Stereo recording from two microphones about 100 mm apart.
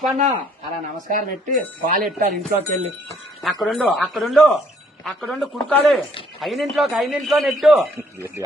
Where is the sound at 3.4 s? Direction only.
Centre (ahead or behind).